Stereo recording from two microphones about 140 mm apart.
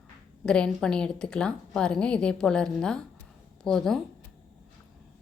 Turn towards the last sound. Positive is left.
turn(degrees=5)  # may be behind; listen again after turning